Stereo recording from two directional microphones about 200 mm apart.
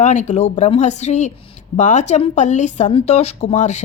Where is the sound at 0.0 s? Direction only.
35° left (ahead or behind).